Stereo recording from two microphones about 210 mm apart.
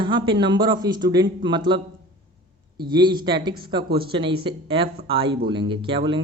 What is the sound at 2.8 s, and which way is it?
A man's voice, 20° right (ahead or behind).